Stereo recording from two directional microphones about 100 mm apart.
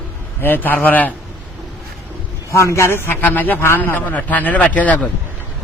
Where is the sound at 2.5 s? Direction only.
30° left (ahead or behind).